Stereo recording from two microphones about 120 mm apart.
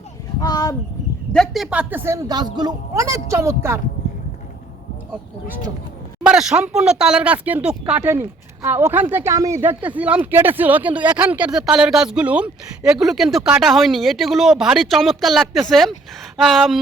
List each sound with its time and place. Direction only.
0.4 s a sound: 30° left (ahead or behind)
1.3 s speech: centre (ahead or behind); by 3.8 s 20° right (ahead or behind)
6.2 s speech: 5° right (ahead or behind)